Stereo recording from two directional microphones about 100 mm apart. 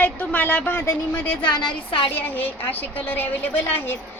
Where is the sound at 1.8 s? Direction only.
60° left (ahead or behind).